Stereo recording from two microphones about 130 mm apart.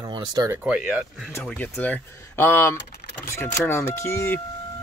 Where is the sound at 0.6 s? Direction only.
5° right (ahead or behind); by 4.4 s 20° left (ahead or behind).